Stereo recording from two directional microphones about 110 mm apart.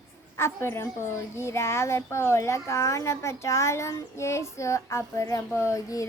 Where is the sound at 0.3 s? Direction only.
25° left (ahead or behind).